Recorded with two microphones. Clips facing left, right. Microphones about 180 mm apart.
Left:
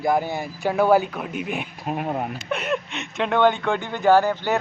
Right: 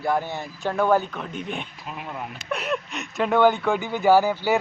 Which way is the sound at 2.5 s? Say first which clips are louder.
Even; centre (ahead or behind).